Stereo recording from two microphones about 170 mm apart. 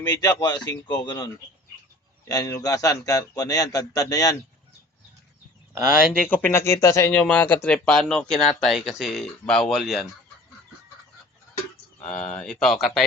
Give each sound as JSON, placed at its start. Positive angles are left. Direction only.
{"t": 0.0, "sound": "a man's voice", "side_deg": 25}
{"t": 6.3, "sound": "speech", "side_deg": 15}
{"t": 12.0, "sound": "speech", "side_deg": 10}